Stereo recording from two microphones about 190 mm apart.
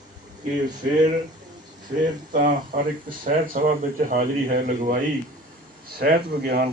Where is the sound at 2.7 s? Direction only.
50° right (ahead or behind).